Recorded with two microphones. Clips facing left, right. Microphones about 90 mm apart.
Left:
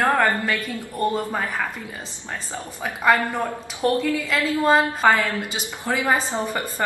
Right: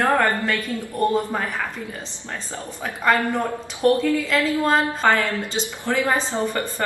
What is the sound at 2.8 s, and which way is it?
Speech, 10° left (ahead or behind).